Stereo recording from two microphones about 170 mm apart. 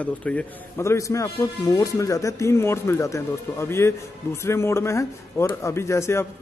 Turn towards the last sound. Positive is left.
turn(degrees=15)  # may be behind; listen again after turning